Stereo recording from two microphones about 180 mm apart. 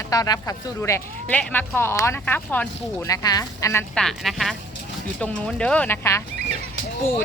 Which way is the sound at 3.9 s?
Centre (ahead or behind).